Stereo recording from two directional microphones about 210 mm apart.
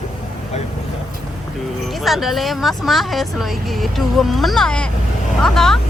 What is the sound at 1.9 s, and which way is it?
Speech, centre (ahead or behind).